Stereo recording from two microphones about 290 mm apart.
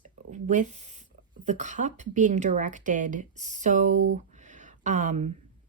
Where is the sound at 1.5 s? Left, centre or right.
Right.